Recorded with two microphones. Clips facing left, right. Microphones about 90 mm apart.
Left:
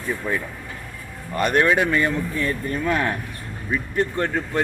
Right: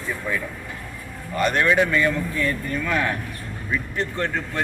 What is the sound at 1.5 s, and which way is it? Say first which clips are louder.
Speech: left 2 dB; 20° left (ahead or behind).